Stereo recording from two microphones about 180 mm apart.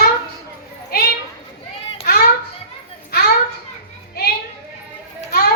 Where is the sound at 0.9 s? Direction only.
60° left (ahead or behind).